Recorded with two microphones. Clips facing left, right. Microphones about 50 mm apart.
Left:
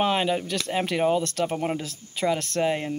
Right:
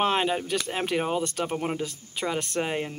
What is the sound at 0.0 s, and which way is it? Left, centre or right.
Speech, centre.